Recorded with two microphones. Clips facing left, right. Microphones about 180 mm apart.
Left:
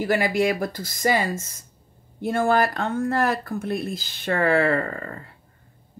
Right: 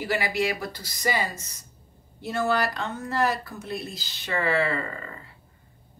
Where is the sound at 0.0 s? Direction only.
50° left (ahead or behind).